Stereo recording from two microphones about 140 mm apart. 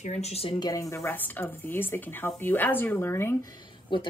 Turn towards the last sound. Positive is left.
turn(degrees=35)  # may be behind; listen again after turning